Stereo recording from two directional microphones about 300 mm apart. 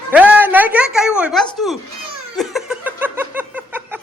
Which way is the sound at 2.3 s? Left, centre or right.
Centre.